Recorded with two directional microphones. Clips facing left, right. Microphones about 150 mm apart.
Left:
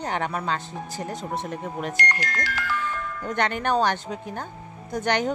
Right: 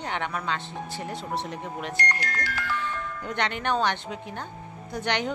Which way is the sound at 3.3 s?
45° left (ahead or behind).